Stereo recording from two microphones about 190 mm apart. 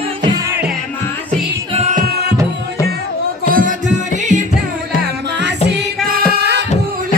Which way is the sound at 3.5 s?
45° right (ahead or behind).